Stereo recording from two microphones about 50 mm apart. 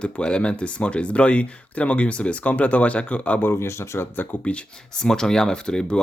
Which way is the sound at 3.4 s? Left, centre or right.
Left.